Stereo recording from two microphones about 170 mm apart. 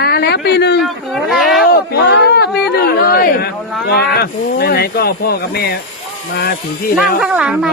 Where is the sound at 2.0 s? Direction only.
80° left.